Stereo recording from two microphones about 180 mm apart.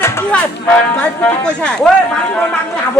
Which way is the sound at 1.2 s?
5° left (ahead or behind).